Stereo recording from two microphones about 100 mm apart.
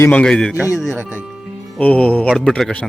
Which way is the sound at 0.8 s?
5° right (ahead or behind).